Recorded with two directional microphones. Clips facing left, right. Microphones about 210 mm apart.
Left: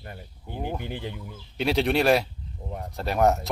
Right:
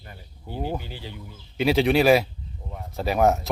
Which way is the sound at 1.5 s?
Centre (ahead or behind).